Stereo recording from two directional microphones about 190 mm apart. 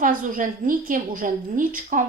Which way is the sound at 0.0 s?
45° right (ahead or behind).